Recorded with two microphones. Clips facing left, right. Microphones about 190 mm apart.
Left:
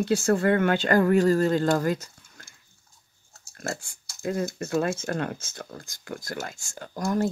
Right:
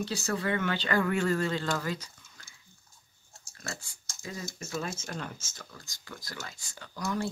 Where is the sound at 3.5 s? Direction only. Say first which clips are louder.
Left 9 dB; 50° left (ahead or behind).